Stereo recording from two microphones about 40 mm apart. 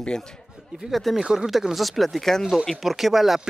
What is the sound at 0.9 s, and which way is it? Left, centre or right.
Speech, centre.